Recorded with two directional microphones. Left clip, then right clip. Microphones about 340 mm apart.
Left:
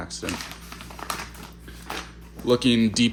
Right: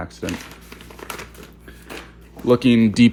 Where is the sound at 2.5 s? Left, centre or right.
Centre.